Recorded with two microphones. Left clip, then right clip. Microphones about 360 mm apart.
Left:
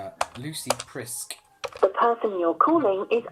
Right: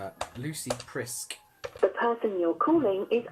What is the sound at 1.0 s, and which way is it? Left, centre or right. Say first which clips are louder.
Speech: right 1 dB; centre.